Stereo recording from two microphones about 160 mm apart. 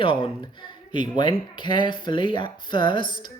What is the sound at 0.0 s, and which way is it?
Speech, 30° left (ahead or behind).